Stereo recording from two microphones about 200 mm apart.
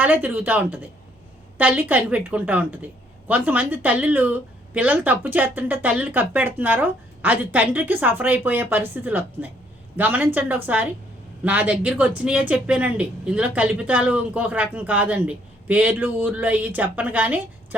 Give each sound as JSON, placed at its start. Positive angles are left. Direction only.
{"t": 0.0, "sound": "speech", "side_deg": -10}